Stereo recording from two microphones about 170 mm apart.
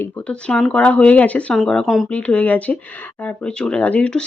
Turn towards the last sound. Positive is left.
turn(degrees=5)  # may be behind; listen again after turning